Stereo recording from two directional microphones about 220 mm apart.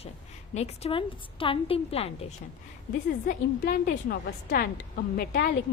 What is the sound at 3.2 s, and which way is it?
A woman's voice, 45° left (ahead or behind).